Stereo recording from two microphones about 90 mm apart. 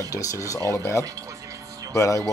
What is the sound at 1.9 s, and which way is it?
Speech, 35° left (ahead or behind).